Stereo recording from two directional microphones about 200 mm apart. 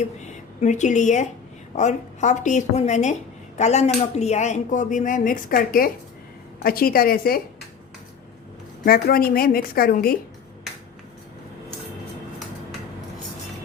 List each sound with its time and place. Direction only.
0.6 s a woman's voice: 35° left (ahead or behind)
8.8 s a woman's voice: 50° left (ahead or behind)